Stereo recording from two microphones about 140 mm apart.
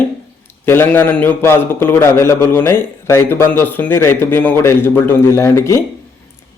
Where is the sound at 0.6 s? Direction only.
15° left (ahead or behind).